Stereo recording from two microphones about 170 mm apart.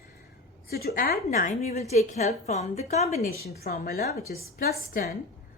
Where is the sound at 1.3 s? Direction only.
45° left (ahead or behind).